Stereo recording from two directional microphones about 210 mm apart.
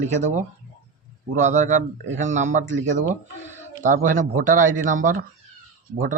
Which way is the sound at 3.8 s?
40° right (ahead or behind).